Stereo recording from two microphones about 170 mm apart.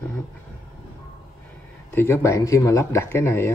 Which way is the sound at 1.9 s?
15° left (ahead or behind).